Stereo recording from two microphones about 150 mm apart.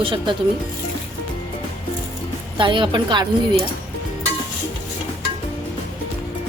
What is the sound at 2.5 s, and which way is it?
Speech, 35° right (ahead or behind).